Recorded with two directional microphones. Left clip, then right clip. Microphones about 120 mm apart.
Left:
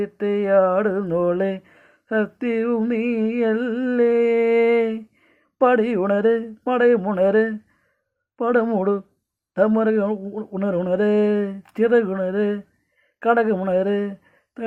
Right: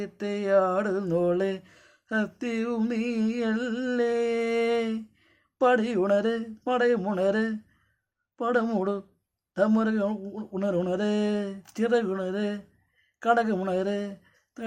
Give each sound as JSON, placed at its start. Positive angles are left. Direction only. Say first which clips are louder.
{"t": 0.0, "sound": "mantra", "louder": "left 9 dB", "side_deg": 30}
{"t": 9.6, "sound": "speech", "louder": "left 7 dB", "side_deg": 30}